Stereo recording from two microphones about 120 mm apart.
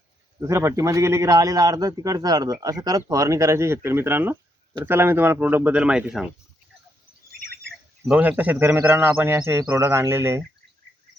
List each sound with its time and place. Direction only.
0.3 s a man's voice: 25° right (ahead or behind); by 6.2 s 5° right (ahead or behind)
8.0 s a man's voice: 10° right (ahead or behind)